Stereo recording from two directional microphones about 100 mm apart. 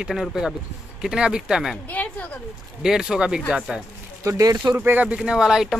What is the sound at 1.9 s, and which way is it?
Speech, 15° left (ahead or behind).